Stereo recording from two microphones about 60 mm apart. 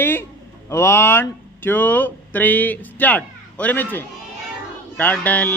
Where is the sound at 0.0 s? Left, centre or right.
Left.